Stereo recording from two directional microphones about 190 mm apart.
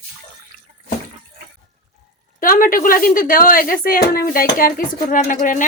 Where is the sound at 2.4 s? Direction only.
45° left (ahead or behind).